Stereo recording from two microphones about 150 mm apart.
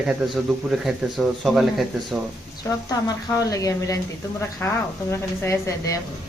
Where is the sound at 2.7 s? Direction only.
20° left (ahead or behind).